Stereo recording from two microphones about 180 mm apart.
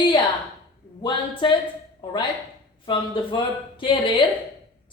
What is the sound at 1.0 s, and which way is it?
Speech, 25° left (ahead or behind).